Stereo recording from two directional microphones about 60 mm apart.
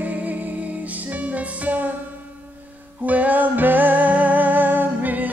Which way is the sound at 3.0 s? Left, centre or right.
Right.